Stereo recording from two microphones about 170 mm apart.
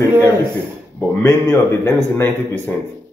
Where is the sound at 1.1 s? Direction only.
15° left (ahead or behind).